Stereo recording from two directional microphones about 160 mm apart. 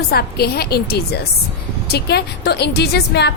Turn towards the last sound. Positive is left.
turn(degrees=90)